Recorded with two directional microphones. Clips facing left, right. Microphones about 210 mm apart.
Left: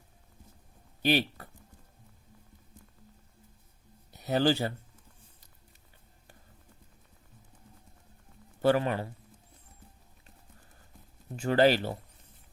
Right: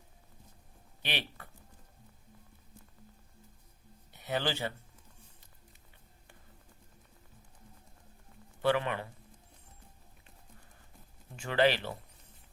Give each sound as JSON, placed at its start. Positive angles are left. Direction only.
{"t": 1.0, "sound": "speech", "side_deg": 40}
{"t": 4.1, "sound": "speech", "side_deg": 40}
{"t": 8.6, "sound": "speech", "side_deg": 40}
{"t": 11.3, "sound": "speech", "side_deg": 40}